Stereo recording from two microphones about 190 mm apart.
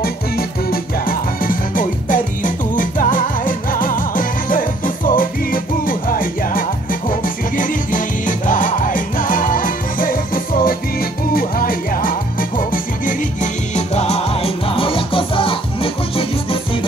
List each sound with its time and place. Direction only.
0.0 s music: 50° left (ahead or behind); by 16.5 s 30° left (ahead or behind)